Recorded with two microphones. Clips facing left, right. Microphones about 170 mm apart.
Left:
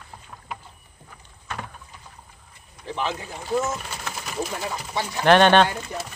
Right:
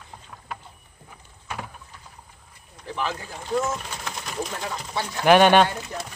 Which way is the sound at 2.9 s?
20° left (ahead or behind).